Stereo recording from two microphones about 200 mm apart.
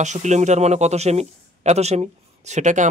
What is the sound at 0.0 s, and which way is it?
A man's voice, 35° right (ahead or behind).